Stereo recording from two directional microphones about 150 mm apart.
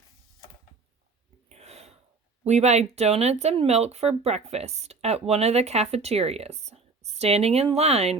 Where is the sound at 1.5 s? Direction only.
45° right (ahead or behind).